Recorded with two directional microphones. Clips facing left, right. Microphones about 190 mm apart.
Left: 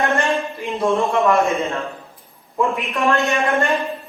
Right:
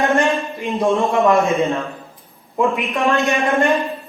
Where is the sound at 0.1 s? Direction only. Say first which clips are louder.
Right 3 dB; 15° right (ahead or behind).